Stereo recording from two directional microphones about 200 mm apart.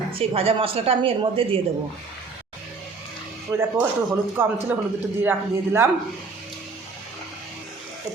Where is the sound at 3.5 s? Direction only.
15° right (ahead or behind).